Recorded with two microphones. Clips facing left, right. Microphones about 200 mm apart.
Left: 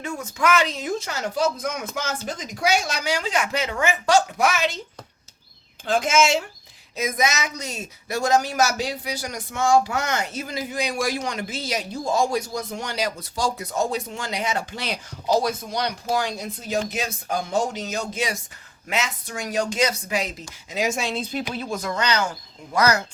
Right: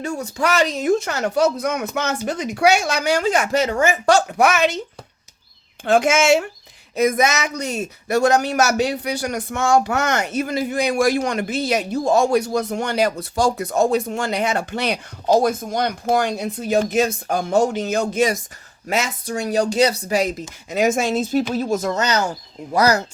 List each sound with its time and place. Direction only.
0.0 s speech: 35° right (ahead or behind); by 4.8 s 65° right (ahead or behind)
5.8 s speech: 65° right (ahead or behind); by 20.3 s 40° right (ahead or behind)
20.7 s speech: 55° right (ahead or behind); by 23.0 s 35° right (ahead or behind)